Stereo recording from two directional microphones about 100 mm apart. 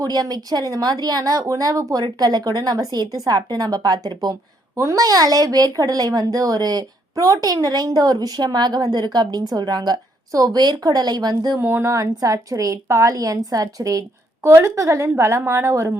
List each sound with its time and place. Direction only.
0.0 s speech: 40° right (ahead or behind)
11.6 s a woman's voice: 25° right (ahead or behind)